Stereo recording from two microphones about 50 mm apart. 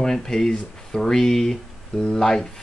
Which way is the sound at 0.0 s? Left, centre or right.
Centre.